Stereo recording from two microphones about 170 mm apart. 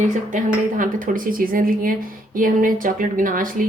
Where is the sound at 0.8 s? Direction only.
55° right (ahead or behind).